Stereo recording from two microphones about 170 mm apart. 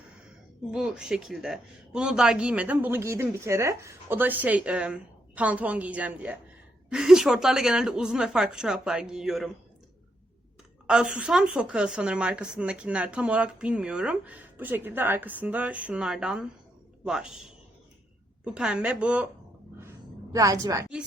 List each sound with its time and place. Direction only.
0.7 s a woman's voice: 5° right (ahead or behind)
10.8 s a woman's voice: 5° right (ahead or behind)
20.3 s a woman's voice: 20° right (ahead or behind)